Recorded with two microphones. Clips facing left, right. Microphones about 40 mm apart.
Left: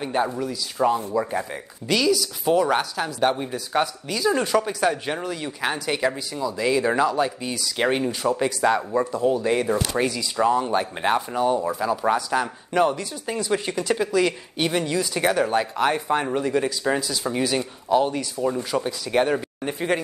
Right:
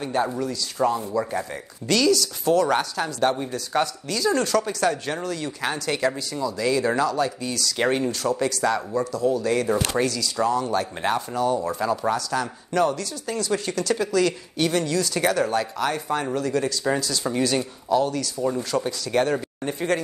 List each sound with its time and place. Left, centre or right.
0.0 s speech: centre
11.7 s speech: centre
12.1 s speech: left
17.9 s speech: left